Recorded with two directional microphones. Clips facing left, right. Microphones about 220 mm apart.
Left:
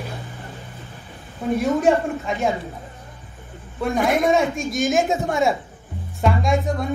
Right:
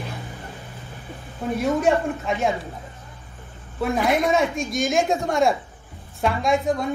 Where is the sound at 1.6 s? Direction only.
Centre (ahead or behind).